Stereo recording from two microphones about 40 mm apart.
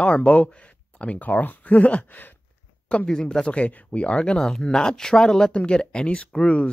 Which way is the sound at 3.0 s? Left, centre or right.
Centre.